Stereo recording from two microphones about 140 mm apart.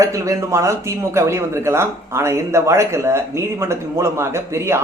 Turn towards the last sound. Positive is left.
turn(degrees=-20)  # may be behind; listen again after turning